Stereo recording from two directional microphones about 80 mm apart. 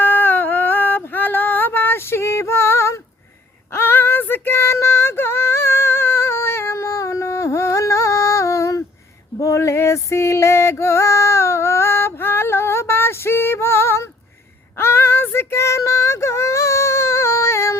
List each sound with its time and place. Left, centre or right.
0.0 s female singing: left
9.4 s music: left
14.8 s female singing: left